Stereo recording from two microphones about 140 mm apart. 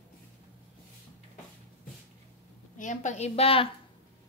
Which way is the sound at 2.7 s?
60° left (ahead or behind).